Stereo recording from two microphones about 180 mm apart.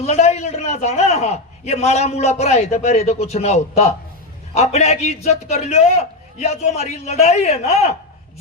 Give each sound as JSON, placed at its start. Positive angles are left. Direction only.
{"t": 0.0, "sound": "a man's voice", "side_deg": 35}